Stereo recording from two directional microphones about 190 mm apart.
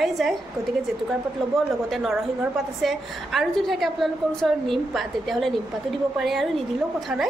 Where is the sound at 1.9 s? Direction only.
Centre (ahead or behind).